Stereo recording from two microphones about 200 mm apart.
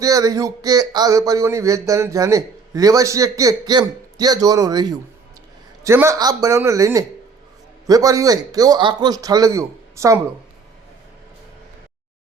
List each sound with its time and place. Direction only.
0.0 s speech: 15° right (ahead or behind)